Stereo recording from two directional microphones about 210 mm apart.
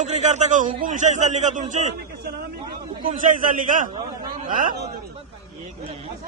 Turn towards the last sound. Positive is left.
turn(degrees=-45)  # may be behind; listen again after turning